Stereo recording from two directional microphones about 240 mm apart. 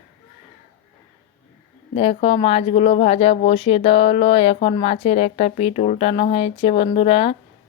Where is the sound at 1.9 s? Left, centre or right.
Left.